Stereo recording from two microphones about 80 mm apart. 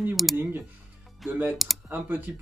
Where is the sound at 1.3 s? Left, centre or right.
Right.